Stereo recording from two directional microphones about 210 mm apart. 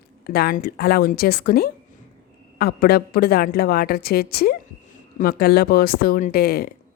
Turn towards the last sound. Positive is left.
turn(degrees=45)  # may be behind; listen again after turning